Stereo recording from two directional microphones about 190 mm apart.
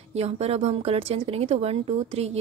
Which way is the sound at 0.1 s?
35° right (ahead or behind).